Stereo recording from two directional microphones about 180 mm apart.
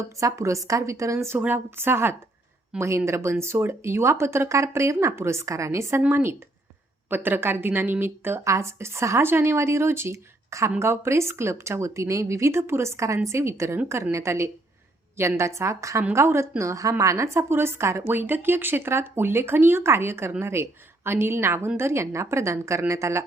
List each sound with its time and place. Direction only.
0.2 s a woman's voice: 15° right (ahead or behind)